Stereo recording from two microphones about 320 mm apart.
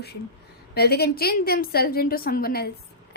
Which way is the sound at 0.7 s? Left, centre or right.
Left.